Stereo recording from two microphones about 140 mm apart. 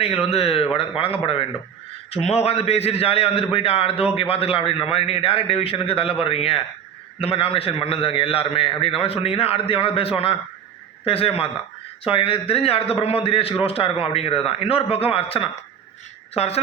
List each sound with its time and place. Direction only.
0.0 s a man's voice: 45° left (ahead or behind)